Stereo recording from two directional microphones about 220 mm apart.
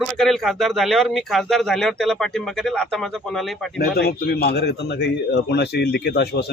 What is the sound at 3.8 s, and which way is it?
A man's voice, 45° left (ahead or behind).